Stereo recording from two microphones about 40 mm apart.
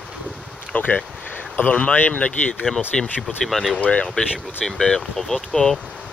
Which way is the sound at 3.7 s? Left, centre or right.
Left.